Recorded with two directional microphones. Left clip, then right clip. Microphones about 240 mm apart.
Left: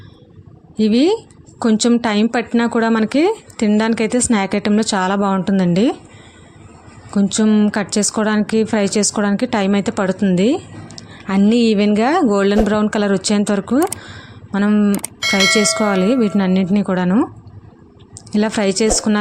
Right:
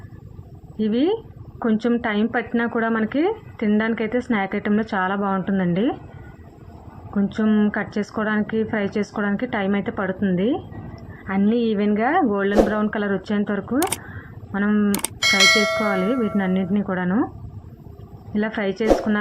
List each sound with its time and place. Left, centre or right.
0.8 s a woman's voice: left
7.1 s a woman's voice: left
14.9 s speech: centre
15.8 s a woman's voice: left
18.3 s a woman's voice: left